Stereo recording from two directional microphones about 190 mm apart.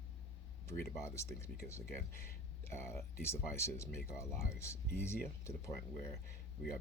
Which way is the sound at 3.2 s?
15° left (ahead or behind).